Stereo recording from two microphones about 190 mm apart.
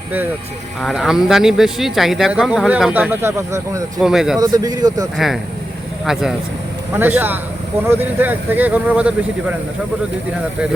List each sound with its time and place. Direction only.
0.8 s speech: centre (ahead or behind); by 4.0 s 15° right (ahead or behind)
4.0 s speech: 5° right (ahead or behind)
4.4 s speech: 20° right (ahead or behind)
5.1 s speech: centre (ahead or behind)